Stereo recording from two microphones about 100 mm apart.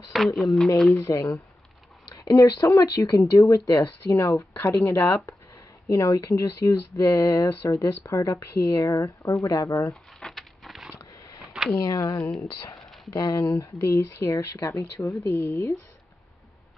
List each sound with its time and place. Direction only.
0.1 s speech: centre (ahead or behind)
0.9 s speech: 25° left (ahead or behind)
4.6 s speech: 20° left (ahead or behind)
5.9 s speech: 35° left (ahead or behind)
10.2 s a sound: centre (ahead or behind)
11.0 s sniff: 35° left (ahead or behind)
11.8 s speech: 35° left (ahead or behind)
13.1 s speech: 45° left (ahead or behind)
13.7 s speech: 30° left (ahead or behind)